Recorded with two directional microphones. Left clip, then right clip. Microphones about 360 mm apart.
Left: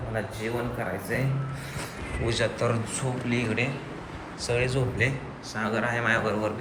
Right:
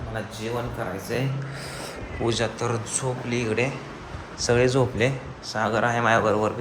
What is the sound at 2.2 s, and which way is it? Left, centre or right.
Speech, centre.